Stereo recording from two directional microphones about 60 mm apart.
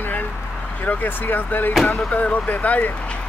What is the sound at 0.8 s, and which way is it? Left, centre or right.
Speech, left.